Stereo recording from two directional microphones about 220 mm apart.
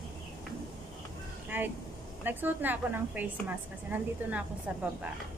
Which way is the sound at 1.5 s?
10° right (ahead or behind).